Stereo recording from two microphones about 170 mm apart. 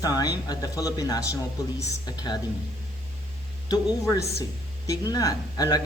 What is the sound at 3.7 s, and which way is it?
A woman's voice, 20° left (ahead or behind).